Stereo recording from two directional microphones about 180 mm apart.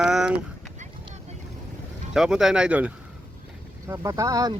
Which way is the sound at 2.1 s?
5° right (ahead or behind).